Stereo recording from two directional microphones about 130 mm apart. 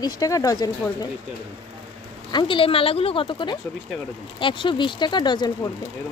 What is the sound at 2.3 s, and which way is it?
Speech, 40° left (ahead or behind).